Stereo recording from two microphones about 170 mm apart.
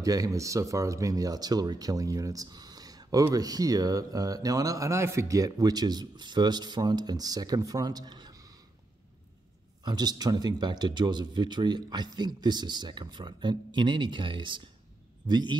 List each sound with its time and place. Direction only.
0.0 s speech: 20° right (ahead or behind)
9.8 s speech: 25° right (ahead or behind)